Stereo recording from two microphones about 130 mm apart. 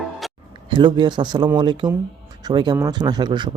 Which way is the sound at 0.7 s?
35° right (ahead or behind).